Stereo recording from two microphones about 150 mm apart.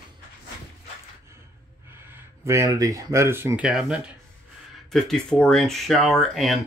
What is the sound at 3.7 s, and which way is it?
Speech, 5° right (ahead or behind).